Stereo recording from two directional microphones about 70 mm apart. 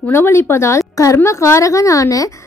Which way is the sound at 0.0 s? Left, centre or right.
Left.